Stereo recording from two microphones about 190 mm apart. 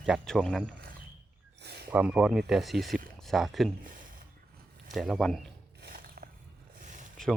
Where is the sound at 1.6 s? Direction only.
60° right (ahead or behind).